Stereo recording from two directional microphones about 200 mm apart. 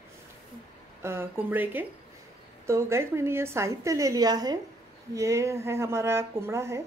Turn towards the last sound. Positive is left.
turn(degrees=-15)  # may be behind; listen again after turning